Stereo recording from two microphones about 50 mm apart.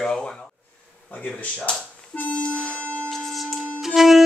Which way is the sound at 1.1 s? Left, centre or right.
Left.